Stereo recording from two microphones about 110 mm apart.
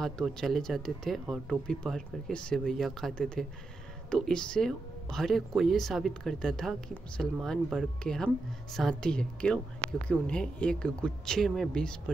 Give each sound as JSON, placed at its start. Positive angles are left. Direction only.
{"t": 0.0, "sound": "speech", "side_deg": 0}